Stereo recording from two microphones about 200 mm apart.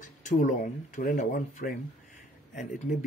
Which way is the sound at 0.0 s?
40° left (ahead or behind).